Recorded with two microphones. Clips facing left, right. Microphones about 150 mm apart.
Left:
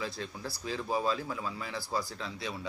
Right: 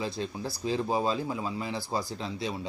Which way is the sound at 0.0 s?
25° right (ahead or behind).